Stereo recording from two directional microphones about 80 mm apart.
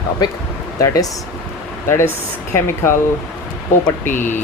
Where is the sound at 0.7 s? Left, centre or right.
Left.